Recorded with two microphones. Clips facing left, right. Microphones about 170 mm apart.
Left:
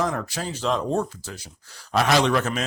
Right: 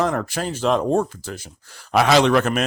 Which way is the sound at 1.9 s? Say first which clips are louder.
Right 4 dB; 70° right (ahead or behind).